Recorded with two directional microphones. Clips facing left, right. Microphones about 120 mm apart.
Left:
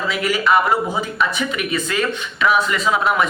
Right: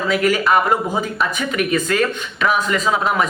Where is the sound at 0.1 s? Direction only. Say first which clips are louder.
Right 2 dB; 45° right (ahead or behind).